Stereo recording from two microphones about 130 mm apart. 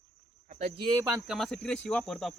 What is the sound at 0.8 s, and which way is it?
Speech, 40° right (ahead or behind).